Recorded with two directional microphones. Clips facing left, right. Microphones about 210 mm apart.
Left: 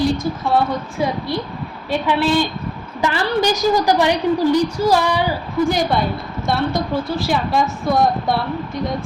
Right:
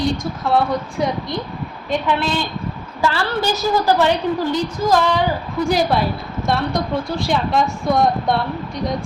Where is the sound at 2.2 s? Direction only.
10° left (ahead or behind).